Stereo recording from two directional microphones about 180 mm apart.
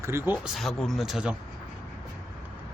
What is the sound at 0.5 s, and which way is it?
Speech, centre (ahead or behind).